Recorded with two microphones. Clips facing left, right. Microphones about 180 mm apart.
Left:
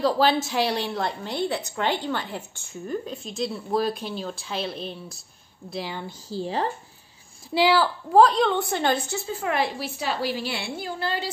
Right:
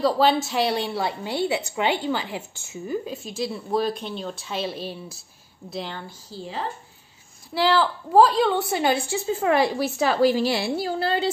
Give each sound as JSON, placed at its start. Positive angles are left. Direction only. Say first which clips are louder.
{"t": 0.0, "sound": "a woman's voice", "louder": "right 1 dB", "side_deg": 0}
{"t": 7.5, "sound": "a woman's voice", "louder": "left 1 dB", "side_deg": 10}
{"t": 9.4, "sound": "a woman's voice", "louder": "right 6 dB", "side_deg": -35}